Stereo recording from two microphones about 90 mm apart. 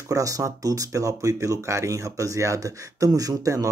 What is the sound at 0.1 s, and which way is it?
Speech, 40° right (ahead or behind).